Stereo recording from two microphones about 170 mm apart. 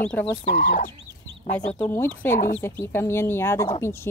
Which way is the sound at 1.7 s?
10° left (ahead or behind).